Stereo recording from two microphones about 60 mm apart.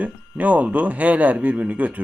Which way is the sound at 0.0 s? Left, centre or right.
Right.